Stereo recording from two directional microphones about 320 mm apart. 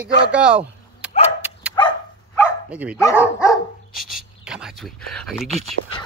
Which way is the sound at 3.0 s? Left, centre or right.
Centre.